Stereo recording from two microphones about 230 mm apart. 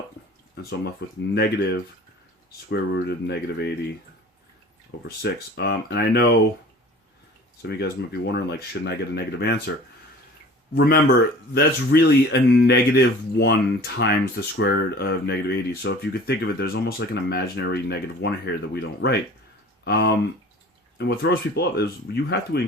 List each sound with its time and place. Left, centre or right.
0.5 s speech: left
5.0 s speech: left
7.6 s speech: left
10.8 s speech: left